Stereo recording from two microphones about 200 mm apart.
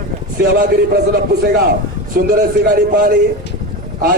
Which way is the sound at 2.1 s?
45° right (ahead or behind).